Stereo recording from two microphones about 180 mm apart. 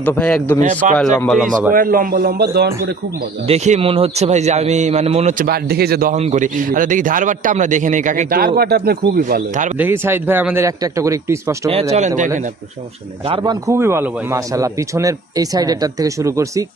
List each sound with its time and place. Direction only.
0.0 s a man's voice: 5° left (ahead or behind)
0.6 s a man's voice: 45° right (ahead or behind)
1.1 s a man's voice: 5° left (ahead or behind)
1.7 s a man's voice: 50° right (ahead or behind)
3.4 s a man's voice: 40° right (ahead or behind)
5.4 s a man's voice: 60° right (ahead or behind)
9.8 s a man's voice: 10° right (ahead or behind)
13.3 s a man's voice: 20° right (ahead or behind)